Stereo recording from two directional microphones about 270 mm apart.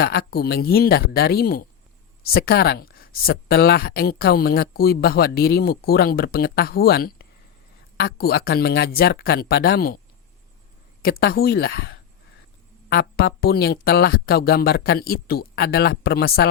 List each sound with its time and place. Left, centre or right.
0.0 s speech: left
11.0 s speech: left